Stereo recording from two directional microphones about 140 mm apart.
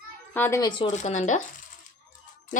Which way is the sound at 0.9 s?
55° left (ahead or behind).